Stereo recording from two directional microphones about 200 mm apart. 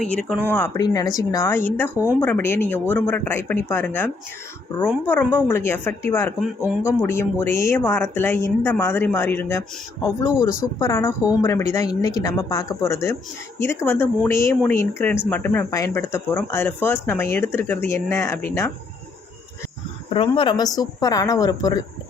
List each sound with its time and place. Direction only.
0.0 s speech: 5° left (ahead or behind)
6.4 s speech: 5° right (ahead or behind)
7.0 s speech: 10° left (ahead or behind)
20.1 s a woman's voice: 25° left (ahead or behind)